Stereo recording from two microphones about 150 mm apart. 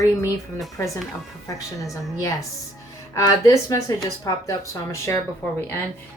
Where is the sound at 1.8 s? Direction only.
20° left (ahead or behind).